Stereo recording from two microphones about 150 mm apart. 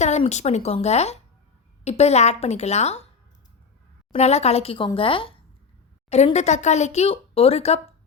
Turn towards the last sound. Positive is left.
turn(degrees=45)  # may be behind; listen again after turning